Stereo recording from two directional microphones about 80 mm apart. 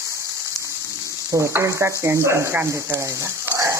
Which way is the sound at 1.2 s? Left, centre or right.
Right.